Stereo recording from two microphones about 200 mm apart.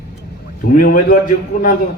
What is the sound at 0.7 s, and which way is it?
Speech, 45° left (ahead or behind).